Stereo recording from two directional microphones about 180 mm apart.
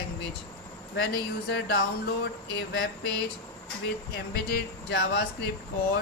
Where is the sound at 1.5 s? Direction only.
70° left (ahead or behind).